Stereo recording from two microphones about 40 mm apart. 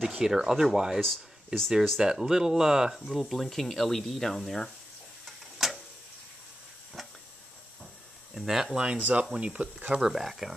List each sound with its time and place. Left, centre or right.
0.2 s speech: centre
1.0 s speech: centre
2.0 s speech: centre
5.2 s a sound: centre
7.0 s a sound: centre
8.4 s speech: centre
8.7 s speech: right
9.8 s speech: centre
10.1 s speech: centre